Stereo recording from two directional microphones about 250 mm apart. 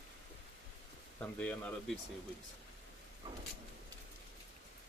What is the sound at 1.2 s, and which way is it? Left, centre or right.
Speech, centre.